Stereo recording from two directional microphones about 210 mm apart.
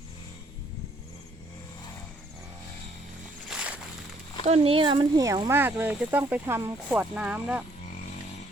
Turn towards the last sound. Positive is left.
turn(degrees=-5)  # may be behind; listen again after turning